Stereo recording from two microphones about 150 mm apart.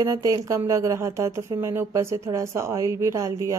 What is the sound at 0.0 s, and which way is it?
A woman's voice, 20° right (ahead or behind).